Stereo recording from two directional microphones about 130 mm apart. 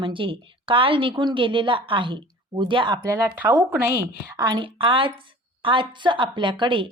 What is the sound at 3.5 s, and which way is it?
A woman's voice, 30° right (ahead or behind).